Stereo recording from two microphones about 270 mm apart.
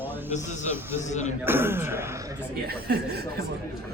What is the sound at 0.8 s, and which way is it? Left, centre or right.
Speech, centre.